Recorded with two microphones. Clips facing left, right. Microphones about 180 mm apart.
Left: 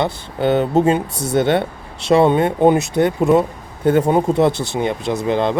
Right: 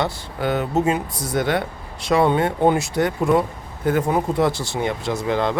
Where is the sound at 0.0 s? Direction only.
25° left (ahead or behind).